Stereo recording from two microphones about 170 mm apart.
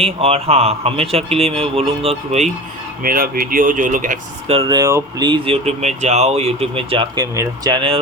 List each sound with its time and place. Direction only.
0.0 s speech: 35° right (ahead or behind)
3.0 s speech: 55° right (ahead or behind)
4.5 s speech: 30° right (ahead or behind)